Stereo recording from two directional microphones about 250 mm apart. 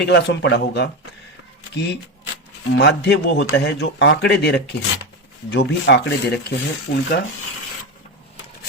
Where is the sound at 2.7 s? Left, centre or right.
Left.